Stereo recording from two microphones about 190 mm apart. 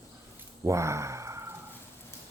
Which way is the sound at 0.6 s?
15° right (ahead or behind).